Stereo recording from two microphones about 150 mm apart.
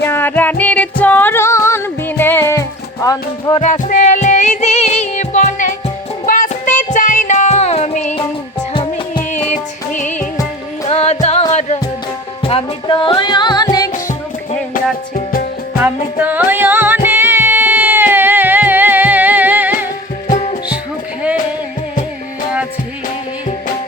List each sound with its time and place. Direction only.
0.0 s music: 15° left (ahead or behind)
3.6 s music: 50° left (ahead or behind)
8.7 s music: 35° left (ahead or behind)
9.3 s music: 55° left (ahead or behind)
10.8 s music: 45° left (ahead or behind); by 13.9 s 25° left (ahead or behind)
15.3 s music: 75° left (ahead or behind)
15.8 s music: 10° right (ahead or behind)
20.2 s music: 50° left (ahead or behind)